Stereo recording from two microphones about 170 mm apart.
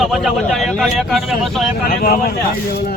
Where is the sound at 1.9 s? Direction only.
60° left (ahead or behind).